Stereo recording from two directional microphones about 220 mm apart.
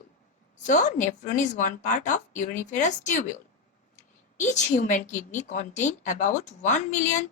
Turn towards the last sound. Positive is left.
turn(degrees=35)  # may be behind; listen again after turning